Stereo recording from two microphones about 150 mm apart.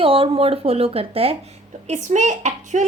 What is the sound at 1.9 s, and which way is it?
Speech, 55° right (ahead or behind).